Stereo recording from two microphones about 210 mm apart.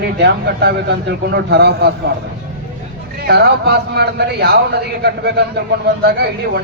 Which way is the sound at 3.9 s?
50° right (ahead or behind).